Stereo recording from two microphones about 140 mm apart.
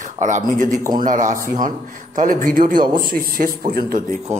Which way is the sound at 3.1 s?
90° right.